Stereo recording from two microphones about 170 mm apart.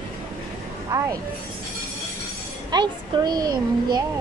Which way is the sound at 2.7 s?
25° right (ahead or behind).